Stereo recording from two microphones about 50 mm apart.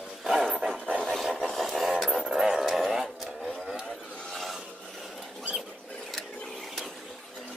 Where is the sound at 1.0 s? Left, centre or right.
Centre.